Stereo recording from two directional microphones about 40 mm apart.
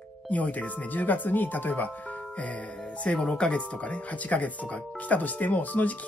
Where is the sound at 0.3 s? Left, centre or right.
Left.